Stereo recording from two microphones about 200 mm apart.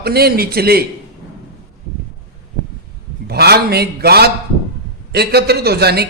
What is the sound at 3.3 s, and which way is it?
A man's voice, 50° right (ahead or behind).